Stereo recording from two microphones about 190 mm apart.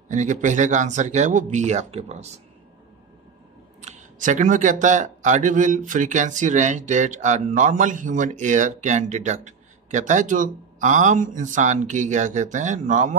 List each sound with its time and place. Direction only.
0.1 s speech: 40° right (ahead or behind)
3.8 s speech: 40° right (ahead or behind)